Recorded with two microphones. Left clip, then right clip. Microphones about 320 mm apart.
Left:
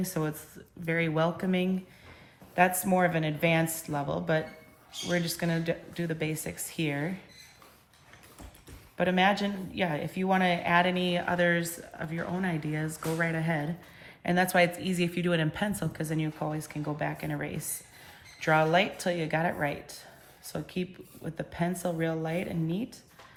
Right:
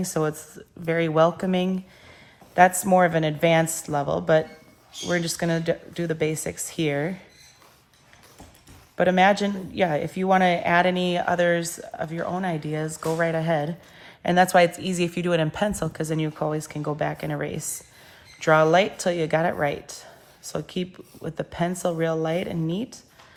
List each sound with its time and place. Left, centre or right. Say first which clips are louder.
0.0 s a woman's voice: right 8 dB; centre
9.0 s a woman's voice: right 7 dB; centre